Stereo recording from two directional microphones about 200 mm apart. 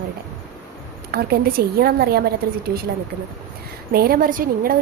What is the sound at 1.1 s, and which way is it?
Speech, 50° right (ahead or behind).